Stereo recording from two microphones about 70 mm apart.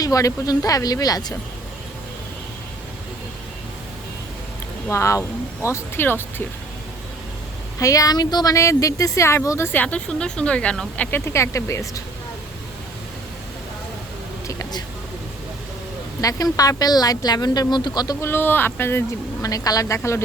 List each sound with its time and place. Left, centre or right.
0.0 s speech: left
4.9 s speech: left
7.8 s speech: left
8.5 s speech: left
9.7 s speech: centre
11.1 s speech: left
16.2 s speech: left
18.2 s speech: left
19.4 s speech: left
20.0 s speech: left